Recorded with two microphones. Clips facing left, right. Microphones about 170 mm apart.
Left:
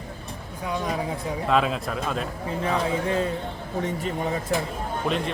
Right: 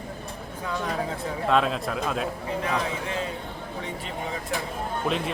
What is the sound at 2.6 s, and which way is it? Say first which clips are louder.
Speech: left 6 dB; 40° left (ahead or behind).